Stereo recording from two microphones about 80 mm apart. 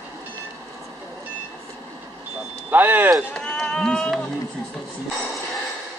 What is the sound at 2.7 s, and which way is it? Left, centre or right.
Vehicle, right.